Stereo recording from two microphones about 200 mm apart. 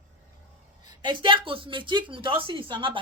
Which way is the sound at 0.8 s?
25° right (ahead or behind).